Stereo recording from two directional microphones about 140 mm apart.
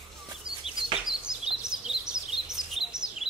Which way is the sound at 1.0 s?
5° right (ahead or behind).